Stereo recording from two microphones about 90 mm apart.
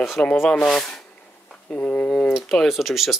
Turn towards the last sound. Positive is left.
turn(degrees=0)  # may be behind; listen again after turning